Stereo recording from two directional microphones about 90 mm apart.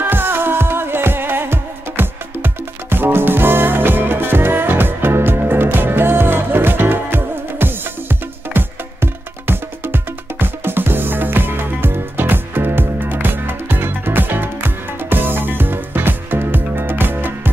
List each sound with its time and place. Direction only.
0.0 s music: 25° right (ahead or behind)